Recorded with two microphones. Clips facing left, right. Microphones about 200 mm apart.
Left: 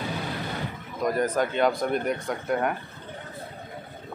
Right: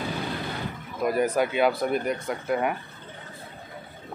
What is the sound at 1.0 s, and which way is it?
Speech, 10° right (ahead or behind).